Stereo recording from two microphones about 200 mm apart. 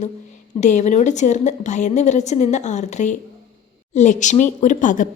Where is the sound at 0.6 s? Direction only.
35° left (ahead or behind).